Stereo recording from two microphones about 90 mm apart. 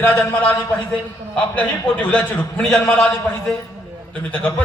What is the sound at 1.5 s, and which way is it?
A man's voice, 15° left (ahead or behind).